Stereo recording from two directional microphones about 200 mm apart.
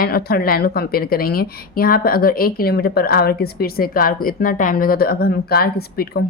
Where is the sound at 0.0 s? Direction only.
50° left (ahead or behind).